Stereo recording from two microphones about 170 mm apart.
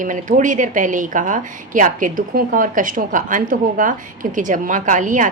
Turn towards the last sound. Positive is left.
turn(degrees=-50)  # may be behind; listen again after turning